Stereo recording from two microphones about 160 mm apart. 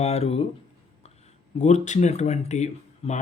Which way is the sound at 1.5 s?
45° left (ahead or behind).